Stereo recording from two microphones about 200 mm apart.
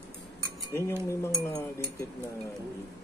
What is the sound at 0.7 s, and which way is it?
Speech, 15° left (ahead or behind).